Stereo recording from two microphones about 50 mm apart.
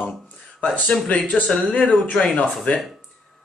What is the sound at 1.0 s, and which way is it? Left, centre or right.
A man's voice, left.